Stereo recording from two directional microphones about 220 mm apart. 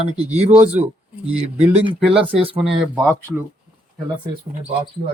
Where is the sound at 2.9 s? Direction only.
10° right (ahead or behind).